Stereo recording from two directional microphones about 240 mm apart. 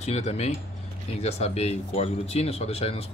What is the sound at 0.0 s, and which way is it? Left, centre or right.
Speech, left.